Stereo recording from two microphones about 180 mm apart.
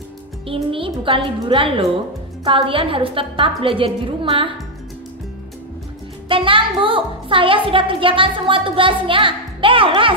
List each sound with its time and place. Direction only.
0.5 s a woman's voice: 30° right (ahead or behind)
6.2 s a woman's voice: 30° right (ahead or behind)